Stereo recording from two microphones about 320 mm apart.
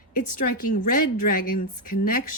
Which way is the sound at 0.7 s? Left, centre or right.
Left.